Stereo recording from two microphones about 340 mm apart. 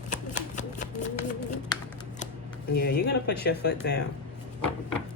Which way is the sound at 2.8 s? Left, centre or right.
Left.